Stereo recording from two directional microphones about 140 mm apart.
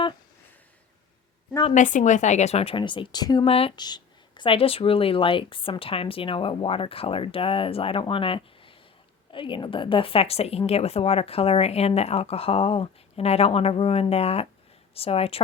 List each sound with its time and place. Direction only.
1.7 s speech: 65° left (ahead or behind); by 3.4 s 30° left (ahead or behind)
3.4 s speech: 45° left (ahead or behind)
3.8 s speech: 30° left (ahead or behind)